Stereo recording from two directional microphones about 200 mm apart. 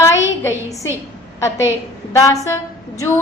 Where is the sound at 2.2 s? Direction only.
15° left (ahead or behind).